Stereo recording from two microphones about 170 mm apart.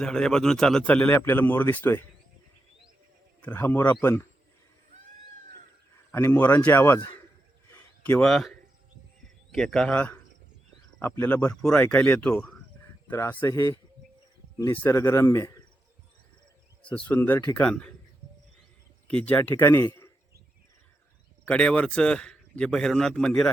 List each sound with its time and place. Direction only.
0.0 s a man's voice: 5° left (ahead or behind)
3.4 s a man's voice: 10° left (ahead or behind)
6.1 s a man's voice: 10° left (ahead or behind)
7.7 s a sound: 10° left (ahead or behind)
9.5 s a man's voice: 5° left (ahead or behind)
16.9 s a man's voice: 10° left (ahead or behind)
19.0 s a man's voice: 10° left (ahead or behind)
21.4 s a man's voice: 5° left (ahead or behind)